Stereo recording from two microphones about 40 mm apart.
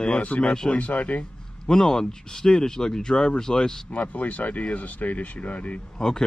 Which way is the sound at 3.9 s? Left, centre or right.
Left.